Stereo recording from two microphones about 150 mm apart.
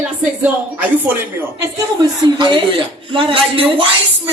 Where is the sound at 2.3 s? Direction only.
30° right (ahead or behind).